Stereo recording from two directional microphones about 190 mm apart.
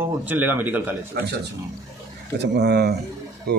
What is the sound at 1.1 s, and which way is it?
Speech, 60° right (ahead or behind).